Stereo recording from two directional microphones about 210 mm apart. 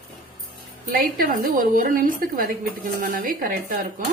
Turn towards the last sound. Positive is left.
turn(degrees=-40)  # may be behind; listen again after turning